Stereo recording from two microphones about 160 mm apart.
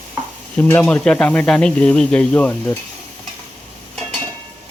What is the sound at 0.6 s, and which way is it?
Speech, 10° left (ahead or behind).